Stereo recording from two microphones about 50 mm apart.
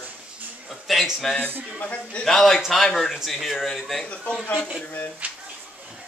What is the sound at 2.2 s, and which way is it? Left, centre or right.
Speech, centre.